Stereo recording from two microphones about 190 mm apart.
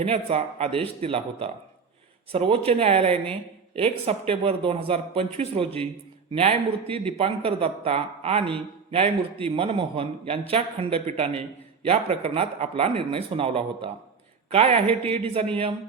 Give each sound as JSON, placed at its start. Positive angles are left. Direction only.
{"t": 0.0, "sound": "a man's voice", "side_deg": -30}